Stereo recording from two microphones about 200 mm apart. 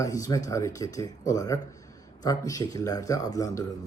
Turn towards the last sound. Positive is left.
turn(degrees=15)  # may be behind; listen again after turning